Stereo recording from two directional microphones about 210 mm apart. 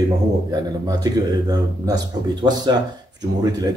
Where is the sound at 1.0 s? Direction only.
20° right (ahead or behind).